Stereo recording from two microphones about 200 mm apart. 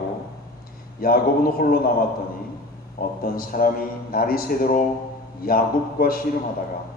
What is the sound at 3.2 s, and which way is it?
A man's voice, 45° left (ahead or behind).